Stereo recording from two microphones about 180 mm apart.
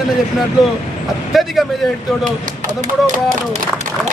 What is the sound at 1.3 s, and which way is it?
Speech, centre (ahead or behind).